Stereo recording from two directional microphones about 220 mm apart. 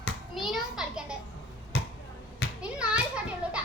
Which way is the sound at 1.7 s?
50° left (ahead or behind).